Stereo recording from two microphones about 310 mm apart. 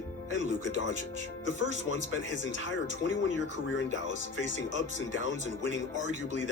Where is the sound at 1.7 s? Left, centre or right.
Right.